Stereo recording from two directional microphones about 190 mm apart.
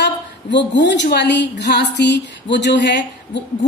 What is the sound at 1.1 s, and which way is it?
Speech, 65° left (ahead or behind).